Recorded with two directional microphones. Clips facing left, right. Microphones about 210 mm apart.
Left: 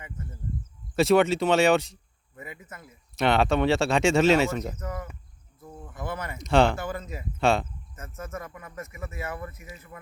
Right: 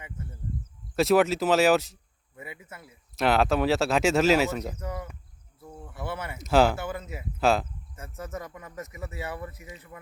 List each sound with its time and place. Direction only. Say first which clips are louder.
0.9 s speech: left 1 dB; centre (ahead or behind)
7.9 s speech: even; 15° right (ahead or behind)